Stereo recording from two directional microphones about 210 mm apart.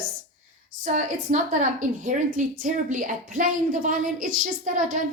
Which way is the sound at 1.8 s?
40° right (ahead or behind).